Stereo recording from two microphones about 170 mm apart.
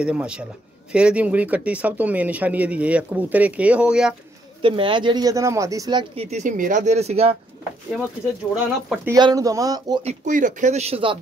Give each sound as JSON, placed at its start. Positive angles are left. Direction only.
{"t": 0.0, "sound": "speech", "side_deg": -5}
{"t": 4.6, "sound": "speech", "side_deg": -30}
{"t": 6.3, "sound": "speech", "side_deg": -50}
{"t": 8.5, "sound": "speech", "side_deg": -5}
{"t": 9.1, "sound": "speech", "side_deg": -20}
{"t": 10.0, "sound": "speech", "side_deg": -50}